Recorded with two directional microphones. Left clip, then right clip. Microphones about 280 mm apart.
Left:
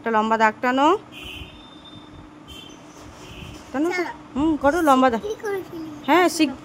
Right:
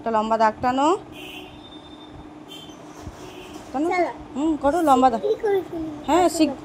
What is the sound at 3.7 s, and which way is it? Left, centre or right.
A child's voice, centre.